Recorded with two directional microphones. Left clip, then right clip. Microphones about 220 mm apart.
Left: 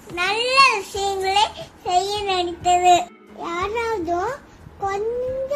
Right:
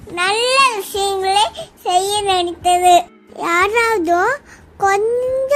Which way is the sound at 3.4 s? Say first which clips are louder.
Right 10 dB; 50° right (ahead or behind).